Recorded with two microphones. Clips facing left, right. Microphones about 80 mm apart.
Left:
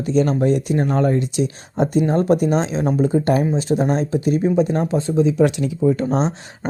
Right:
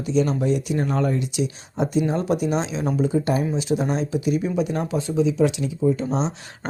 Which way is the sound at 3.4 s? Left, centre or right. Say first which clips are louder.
Left 4 dB; left.